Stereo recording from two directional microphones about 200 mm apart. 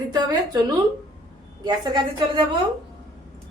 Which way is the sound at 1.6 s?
20° right (ahead or behind).